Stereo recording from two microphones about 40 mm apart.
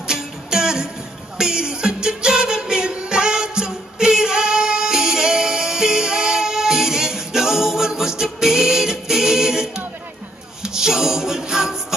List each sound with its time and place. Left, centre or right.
0.0 s music: centre